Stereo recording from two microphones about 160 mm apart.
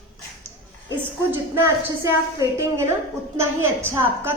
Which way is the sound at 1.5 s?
20° right (ahead or behind).